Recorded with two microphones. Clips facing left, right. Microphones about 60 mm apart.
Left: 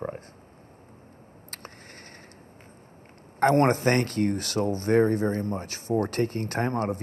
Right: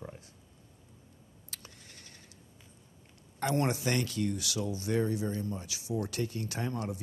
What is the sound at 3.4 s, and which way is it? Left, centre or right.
Speech, left.